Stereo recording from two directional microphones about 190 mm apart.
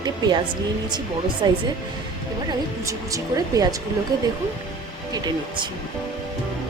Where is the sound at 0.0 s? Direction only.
20° right (ahead or behind).